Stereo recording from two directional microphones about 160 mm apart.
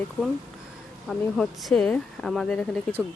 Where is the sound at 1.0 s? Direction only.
Centre (ahead or behind).